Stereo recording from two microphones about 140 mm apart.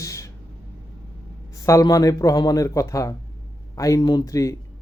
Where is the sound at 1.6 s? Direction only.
20° left (ahead or behind).